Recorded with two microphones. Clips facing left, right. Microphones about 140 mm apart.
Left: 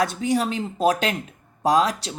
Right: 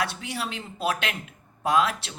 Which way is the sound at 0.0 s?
45° left (ahead or behind).